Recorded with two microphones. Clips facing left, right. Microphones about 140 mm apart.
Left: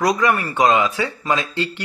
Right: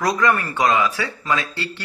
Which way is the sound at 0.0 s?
15° left (ahead or behind).